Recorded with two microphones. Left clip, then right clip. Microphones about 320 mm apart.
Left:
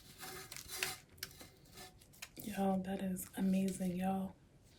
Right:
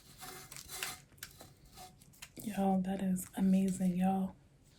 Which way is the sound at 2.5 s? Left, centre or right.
Centre.